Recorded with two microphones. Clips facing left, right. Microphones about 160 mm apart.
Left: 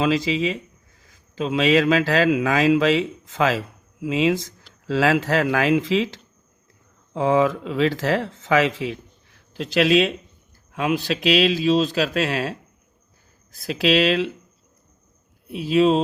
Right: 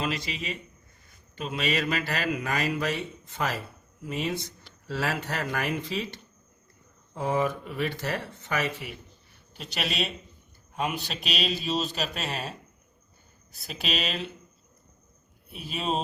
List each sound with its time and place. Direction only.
0.0 s speech: 90° left
15.4 s speech: 90° left